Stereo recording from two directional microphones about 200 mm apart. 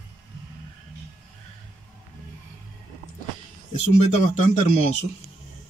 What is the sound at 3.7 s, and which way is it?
Speech, 35° left (ahead or behind).